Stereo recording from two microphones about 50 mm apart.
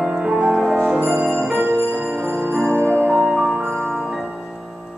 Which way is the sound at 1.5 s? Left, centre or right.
Right.